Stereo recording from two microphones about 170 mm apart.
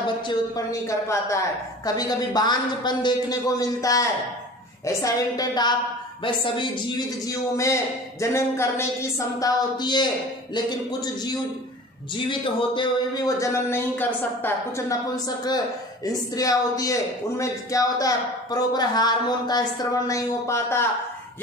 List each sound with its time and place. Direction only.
0.3 s speech: 20° left (ahead or behind)
7.2 s speech: 20° left (ahead or behind)